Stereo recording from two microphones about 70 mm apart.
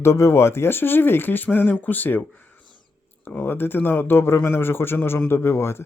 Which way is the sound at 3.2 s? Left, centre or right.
Left.